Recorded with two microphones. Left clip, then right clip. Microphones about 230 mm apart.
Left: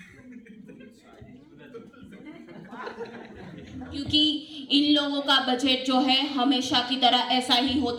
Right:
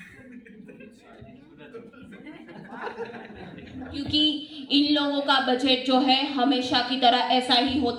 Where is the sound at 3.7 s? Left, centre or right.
Left.